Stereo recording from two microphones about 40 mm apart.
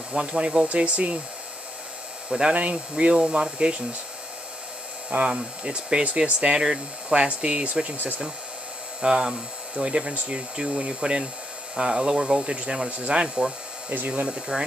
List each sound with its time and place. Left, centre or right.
0.1 s speech: right
2.2 s speech: right
2.5 s speech: right
5.1 s speech: right
5.6 s speech: right
9.0 s speech: centre